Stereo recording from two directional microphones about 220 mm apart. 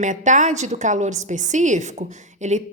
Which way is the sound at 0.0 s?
35° right (ahead or behind).